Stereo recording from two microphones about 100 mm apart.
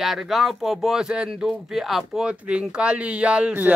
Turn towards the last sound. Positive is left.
turn(degrees=-15)  # may be behind; listen again after turning